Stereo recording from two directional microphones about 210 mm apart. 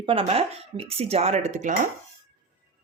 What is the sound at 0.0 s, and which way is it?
Speech, 25° right (ahead or behind).